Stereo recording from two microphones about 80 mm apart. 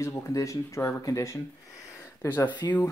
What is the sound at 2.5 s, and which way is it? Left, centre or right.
Speech, left.